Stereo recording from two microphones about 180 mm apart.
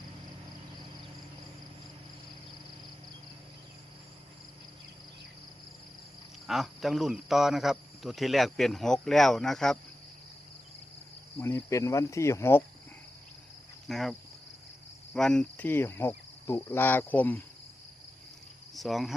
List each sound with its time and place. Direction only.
6.5 s speech: centre (ahead or behind)
11.3 s speech: 15° left (ahead or behind)
13.8 s speech: centre (ahead or behind)
18.7 s speech: centre (ahead or behind)